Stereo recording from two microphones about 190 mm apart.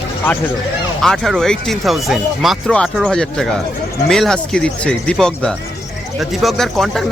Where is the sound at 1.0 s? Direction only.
Centre (ahead or behind).